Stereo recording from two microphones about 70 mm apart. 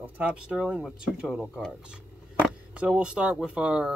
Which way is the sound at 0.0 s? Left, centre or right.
Centre.